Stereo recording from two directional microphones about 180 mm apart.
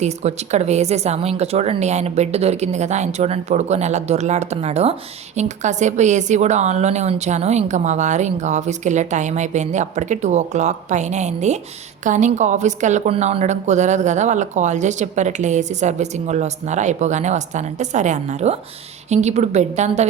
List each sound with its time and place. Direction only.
0.0 s a woman's voice: 40° right (ahead or behind)